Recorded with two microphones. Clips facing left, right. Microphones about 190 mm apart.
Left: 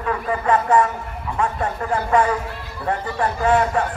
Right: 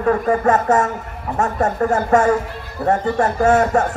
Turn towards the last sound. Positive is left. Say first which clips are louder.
# right 4 dB
turn(degrees=-45)  # may be behind; listen again after turning